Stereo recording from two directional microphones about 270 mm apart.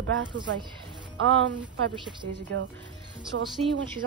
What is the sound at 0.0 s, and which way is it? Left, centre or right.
Speech, right.